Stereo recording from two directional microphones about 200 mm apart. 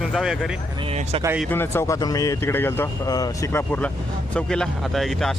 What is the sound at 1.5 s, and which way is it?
Speech, 10° left (ahead or behind).